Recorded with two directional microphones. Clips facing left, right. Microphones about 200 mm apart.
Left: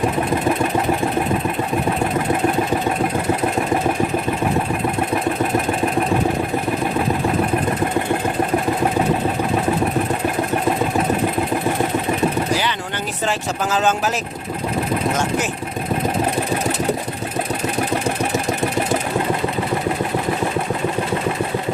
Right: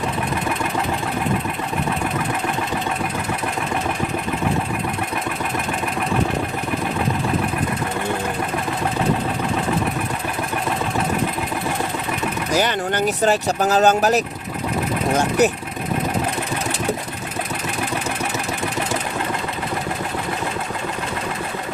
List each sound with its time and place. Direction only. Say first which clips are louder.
13.2 s speech: right 2 dB; 40° right (ahead or behind)